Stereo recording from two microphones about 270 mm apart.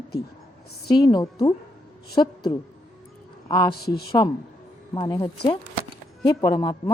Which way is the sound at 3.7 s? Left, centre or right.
Left.